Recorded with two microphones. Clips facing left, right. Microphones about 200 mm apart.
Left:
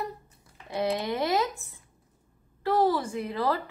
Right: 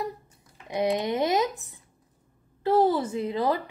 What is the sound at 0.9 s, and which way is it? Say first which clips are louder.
A child's voice: right 2 dB; 20° right (ahead or behind).